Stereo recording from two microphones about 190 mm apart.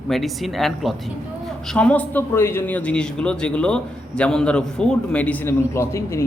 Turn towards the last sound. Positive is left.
turn(degrees=15)  # may be behind; listen again after turning